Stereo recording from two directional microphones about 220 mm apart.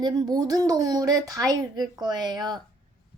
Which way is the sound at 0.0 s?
20° right (ahead or behind).